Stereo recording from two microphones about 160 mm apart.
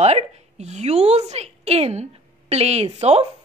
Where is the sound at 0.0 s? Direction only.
45° right (ahead or behind).